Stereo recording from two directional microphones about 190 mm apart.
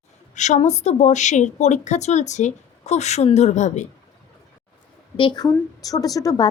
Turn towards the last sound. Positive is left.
turn(degrees=20)  # may be behind; listen again after turning